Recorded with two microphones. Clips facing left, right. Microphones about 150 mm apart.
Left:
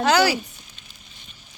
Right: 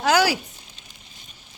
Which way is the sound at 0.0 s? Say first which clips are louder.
Left 1 dB; 10° right (ahead or behind).